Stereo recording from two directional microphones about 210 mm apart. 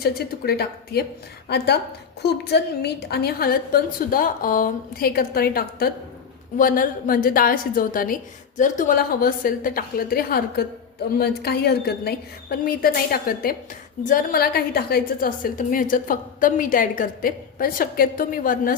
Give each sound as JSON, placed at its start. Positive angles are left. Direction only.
{"t": 0.0, "sound": "a woman's voice", "side_deg": 50}